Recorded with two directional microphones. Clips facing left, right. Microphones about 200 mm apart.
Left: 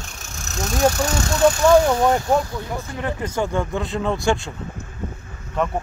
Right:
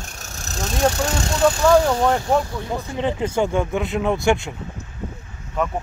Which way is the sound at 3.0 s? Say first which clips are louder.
Right 4 dB; 15° right (ahead or behind).